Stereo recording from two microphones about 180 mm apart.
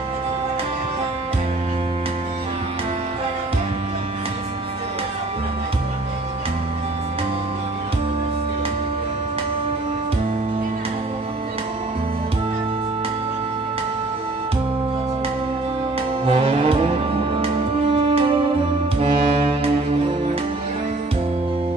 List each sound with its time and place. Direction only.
16.3 s music: 30° right (ahead or behind)